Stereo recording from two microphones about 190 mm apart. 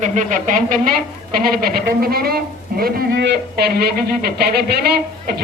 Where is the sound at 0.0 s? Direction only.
40° right (ahead or behind).